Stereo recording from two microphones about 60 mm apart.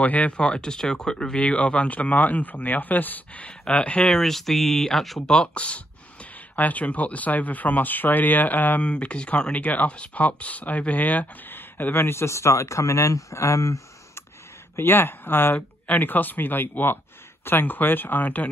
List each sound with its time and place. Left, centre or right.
0.0 s speech: left
4.0 s speech: centre; by 8.9 s left
8.9 s speech: centre; by 14.2 s left
14.8 s speech: left